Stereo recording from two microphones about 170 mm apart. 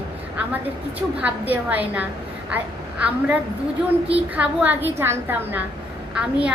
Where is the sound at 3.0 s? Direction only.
10° right (ahead or behind).